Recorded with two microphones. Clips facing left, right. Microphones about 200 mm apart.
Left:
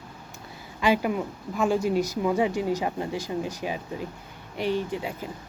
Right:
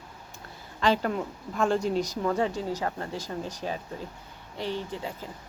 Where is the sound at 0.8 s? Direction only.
10° left (ahead or behind).